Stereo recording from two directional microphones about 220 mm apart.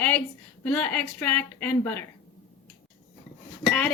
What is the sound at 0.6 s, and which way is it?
Speech, 5° left (ahead or behind).